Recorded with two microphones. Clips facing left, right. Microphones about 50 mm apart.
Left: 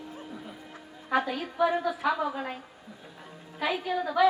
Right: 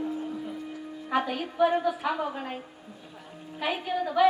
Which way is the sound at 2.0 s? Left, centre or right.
Right.